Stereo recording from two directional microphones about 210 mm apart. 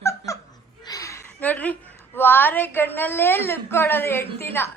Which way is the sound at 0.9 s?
15° left (ahead or behind).